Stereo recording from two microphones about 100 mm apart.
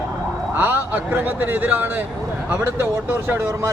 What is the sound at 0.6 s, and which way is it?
A man's voice, 15° right (ahead or behind).